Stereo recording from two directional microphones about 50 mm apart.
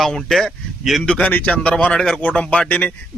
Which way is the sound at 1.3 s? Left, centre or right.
Left.